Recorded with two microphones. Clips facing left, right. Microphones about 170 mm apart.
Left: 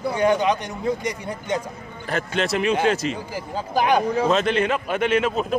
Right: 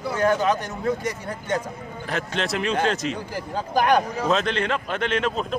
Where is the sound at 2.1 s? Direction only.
Centre (ahead or behind).